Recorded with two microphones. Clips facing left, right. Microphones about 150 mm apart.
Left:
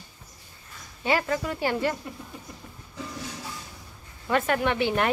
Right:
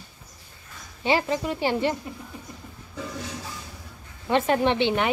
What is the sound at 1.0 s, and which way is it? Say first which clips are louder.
Speech: right 2 dB; 25° right (ahead or behind).